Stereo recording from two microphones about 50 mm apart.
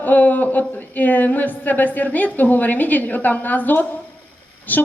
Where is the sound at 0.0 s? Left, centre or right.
Left.